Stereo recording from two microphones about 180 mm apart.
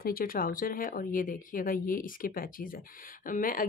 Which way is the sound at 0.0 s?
55° left (ahead or behind).